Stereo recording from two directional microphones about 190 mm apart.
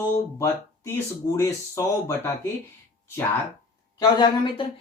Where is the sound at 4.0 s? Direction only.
25° left (ahead or behind).